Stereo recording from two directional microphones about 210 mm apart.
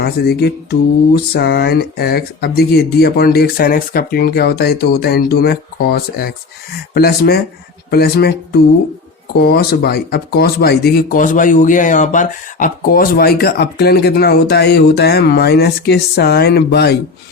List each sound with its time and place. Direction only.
0.0 s speech: 50° left (ahead or behind)